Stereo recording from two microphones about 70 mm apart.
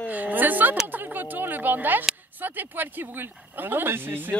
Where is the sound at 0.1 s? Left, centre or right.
Right.